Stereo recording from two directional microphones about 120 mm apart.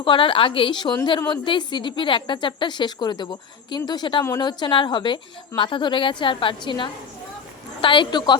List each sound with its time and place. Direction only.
0.0 s a woman's voice: 45° left (ahead or behind)